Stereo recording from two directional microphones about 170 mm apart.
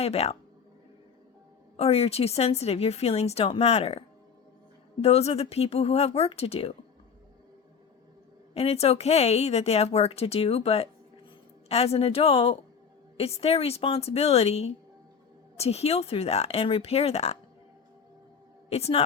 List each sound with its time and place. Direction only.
0.0 s speech: 40° left (ahead or behind)
1.7 s speech: 35° left (ahead or behind)
8.5 s speech: 35° left (ahead or behind)
18.7 s speech: 35° left (ahead or behind)